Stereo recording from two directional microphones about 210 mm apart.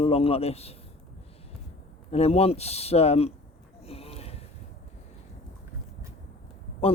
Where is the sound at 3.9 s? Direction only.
30° left (ahead or behind).